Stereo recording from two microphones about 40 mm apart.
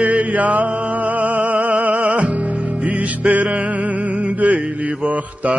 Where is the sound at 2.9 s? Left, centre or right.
Right.